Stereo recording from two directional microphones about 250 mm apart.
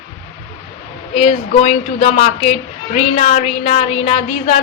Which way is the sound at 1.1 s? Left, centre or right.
Left.